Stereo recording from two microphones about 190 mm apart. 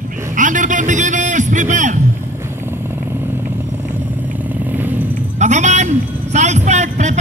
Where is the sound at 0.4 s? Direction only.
40° right (ahead or behind).